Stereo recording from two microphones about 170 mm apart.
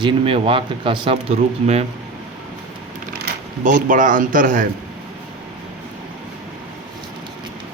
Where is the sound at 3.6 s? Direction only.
50° right (ahead or behind).